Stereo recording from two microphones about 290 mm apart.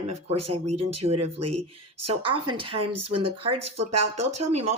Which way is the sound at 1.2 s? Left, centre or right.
Right.